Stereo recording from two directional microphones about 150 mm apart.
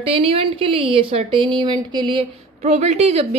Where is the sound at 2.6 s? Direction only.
50° right (ahead or behind).